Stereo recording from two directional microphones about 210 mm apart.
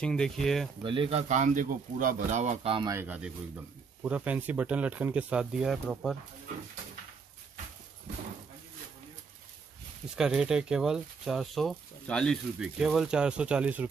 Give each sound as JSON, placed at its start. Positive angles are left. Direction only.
{"t": 0.0, "sound": "speech", "side_deg": 5}
{"t": 0.8, "sound": "speech", "side_deg": -25}
{"t": 2.9, "sound": "speech", "side_deg": -10}
{"t": 10.1, "sound": "speech", "side_deg": -5}